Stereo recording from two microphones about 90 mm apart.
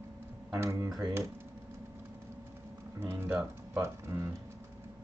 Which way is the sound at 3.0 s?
30° right (ahead or behind).